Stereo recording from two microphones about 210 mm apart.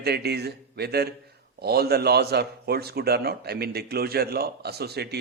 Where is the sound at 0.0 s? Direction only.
50° right (ahead or behind).